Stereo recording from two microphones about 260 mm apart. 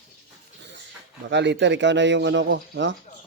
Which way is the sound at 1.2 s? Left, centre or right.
Right.